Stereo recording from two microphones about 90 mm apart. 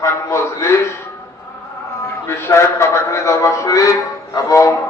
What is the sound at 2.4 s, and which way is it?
A man's voice, 30° left (ahead or behind).